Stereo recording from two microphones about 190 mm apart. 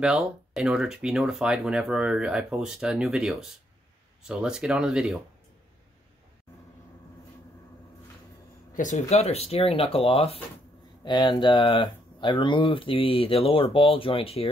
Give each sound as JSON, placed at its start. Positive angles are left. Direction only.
{"t": 0.0, "sound": "speech", "side_deg": -5}
{"t": 8.7, "sound": "speech", "side_deg": 40}